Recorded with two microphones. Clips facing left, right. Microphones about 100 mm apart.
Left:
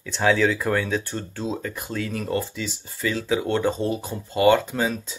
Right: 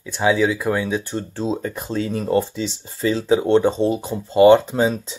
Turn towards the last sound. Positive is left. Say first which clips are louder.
# right 6 dB
turn(degrees=-25)  # may be behind; listen again after turning